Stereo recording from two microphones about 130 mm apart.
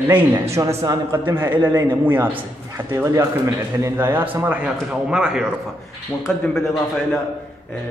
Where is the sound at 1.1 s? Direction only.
15° right (ahead or behind).